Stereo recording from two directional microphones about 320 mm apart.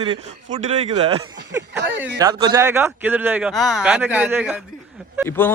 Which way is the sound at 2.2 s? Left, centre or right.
Centre.